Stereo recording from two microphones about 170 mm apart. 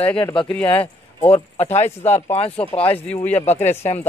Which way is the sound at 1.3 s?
40° left (ahead or behind).